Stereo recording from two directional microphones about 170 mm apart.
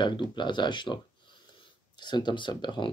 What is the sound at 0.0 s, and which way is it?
Speech, 25° left (ahead or behind).